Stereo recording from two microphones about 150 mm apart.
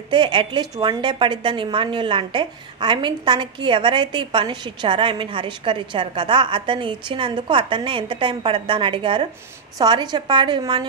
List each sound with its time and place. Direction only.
0.1 s a woman's voice: 30° right (ahead or behind)